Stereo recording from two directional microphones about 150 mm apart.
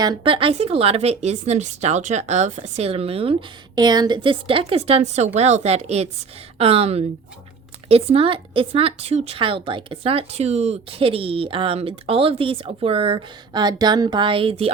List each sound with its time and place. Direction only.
0.0 s speech: 30° right (ahead or behind)
3.8 s speech: 30° right (ahead or behind)